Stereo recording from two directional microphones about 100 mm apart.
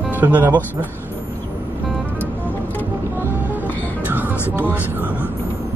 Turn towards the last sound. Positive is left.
turn(degrees=-15)  # may be behind; listen again after turning